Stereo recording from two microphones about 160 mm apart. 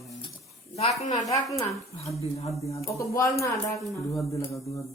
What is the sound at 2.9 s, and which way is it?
Speech, 20° left (ahead or behind).